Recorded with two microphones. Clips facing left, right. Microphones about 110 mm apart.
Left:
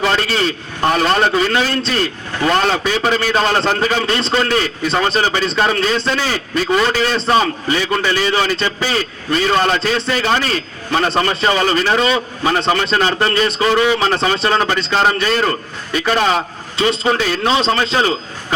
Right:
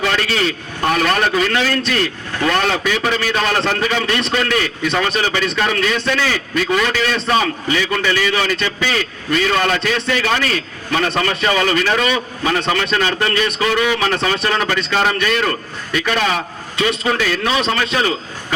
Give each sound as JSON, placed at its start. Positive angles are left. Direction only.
{"t": 0.0, "sound": "a man's voice", "side_deg": 35}